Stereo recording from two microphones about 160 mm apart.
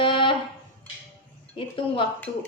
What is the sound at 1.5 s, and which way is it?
Speech, 35° left (ahead or behind).